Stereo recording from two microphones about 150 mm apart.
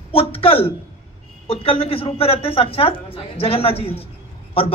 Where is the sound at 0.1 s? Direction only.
40° left (ahead or behind).